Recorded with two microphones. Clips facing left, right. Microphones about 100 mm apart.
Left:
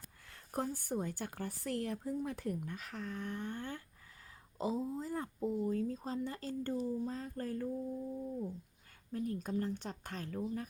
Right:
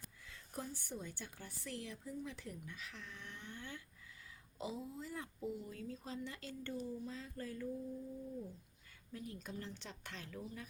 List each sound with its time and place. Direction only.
0.3 s a woman's voice: 50° left (ahead or behind)
9.1 s a woman's voice: 45° left (ahead or behind)